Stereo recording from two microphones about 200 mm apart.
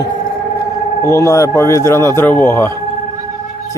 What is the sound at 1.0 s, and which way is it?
Speech, 15° left (ahead or behind).